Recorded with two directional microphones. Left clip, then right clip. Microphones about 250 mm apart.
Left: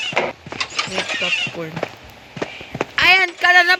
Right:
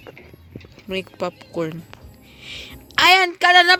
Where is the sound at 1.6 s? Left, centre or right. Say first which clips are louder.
Right 4 dB; centre.